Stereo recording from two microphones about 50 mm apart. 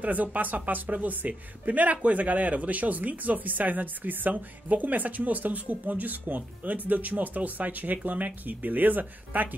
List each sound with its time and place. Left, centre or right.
0.0 s speech: right